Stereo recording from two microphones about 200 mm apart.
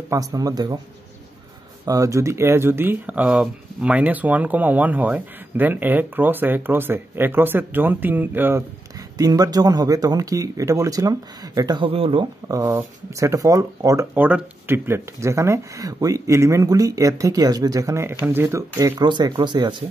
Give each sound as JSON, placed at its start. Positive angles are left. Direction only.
{"t": 0.1, "sound": "speech", "side_deg": -15}
{"t": 1.9, "sound": "speech", "side_deg": -15}